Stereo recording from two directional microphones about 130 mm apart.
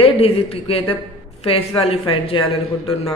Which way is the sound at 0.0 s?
45° left (ahead or behind).